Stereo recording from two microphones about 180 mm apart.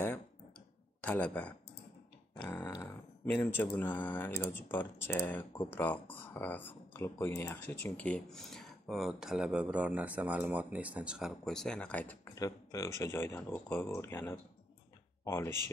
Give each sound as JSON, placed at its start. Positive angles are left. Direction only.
{"t": 1.0, "sound": "speech", "side_deg": 10}
{"t": 12.4, "sound": "speech", "side_deg": 20}